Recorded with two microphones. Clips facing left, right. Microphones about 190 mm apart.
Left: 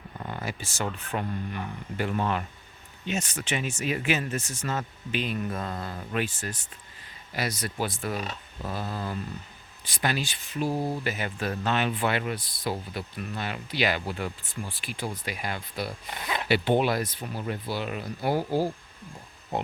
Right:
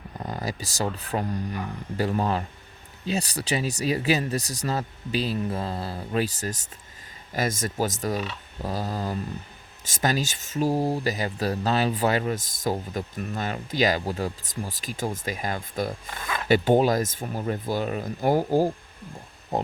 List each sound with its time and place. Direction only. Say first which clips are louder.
0.2 s speech: right 3 dB; 40° right (ahead or behind)
16.0 s speech: even; 20° left (ahead or behind)
16.5 s speech: right 4 dB; 40° right (ahead or behind)